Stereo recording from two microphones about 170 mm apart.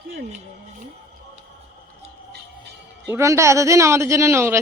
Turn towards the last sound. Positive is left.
turn(degrees=-15)  # may be behind; listen again after turning